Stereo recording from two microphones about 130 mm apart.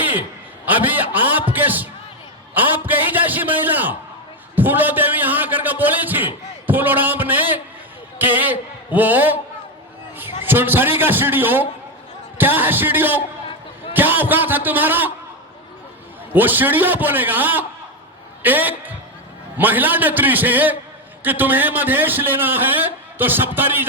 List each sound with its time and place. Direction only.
0.0 s a sound: 15° right (ahead or behind)
1.5 s a man's voice: 15° right (ahead or behind)
2.6 s a sound: 15° right (ahead or behind)
8.2 s a man's voice: 15° right (ahead or behind)
10.4 s a man's voice: 15° right (ahead or behind)
16.3 s a man's voice: 15° right (ahead or behind)